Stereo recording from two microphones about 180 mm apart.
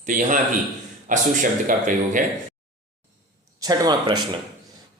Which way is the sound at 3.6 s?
20° right (ahead or behind).